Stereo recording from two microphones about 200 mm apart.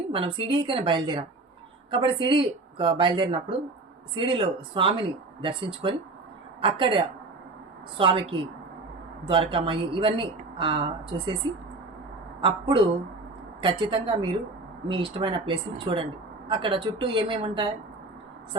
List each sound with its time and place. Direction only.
0.1 s speech: 25° right (ahead or behind)
12.4 s speech: 25° right (ahead or behind)